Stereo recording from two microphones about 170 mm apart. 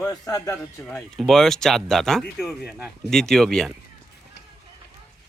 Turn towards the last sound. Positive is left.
turn(degrees=5)  # may be behind; listen again after turning